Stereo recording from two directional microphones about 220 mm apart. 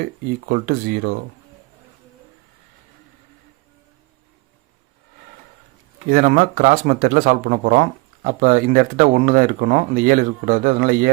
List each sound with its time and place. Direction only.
0.4 s speech: 40° right (ahead or behind)
6.1 s speech: 40° right (ahead or behind)